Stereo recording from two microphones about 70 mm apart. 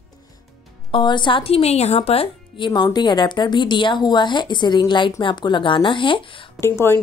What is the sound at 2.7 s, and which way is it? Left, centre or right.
A woman's voice, left.